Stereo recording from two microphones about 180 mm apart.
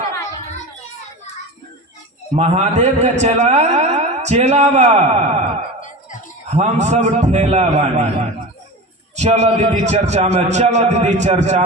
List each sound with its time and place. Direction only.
2.3 s a man's voice: 40° right (ahead or behind)
5.8 s a sound: 45° left (ahead or behind)
6.5 s a man's voice: 40° right (ahead or behind)
9.1 s a man's voice: 40° right (ahead or behind)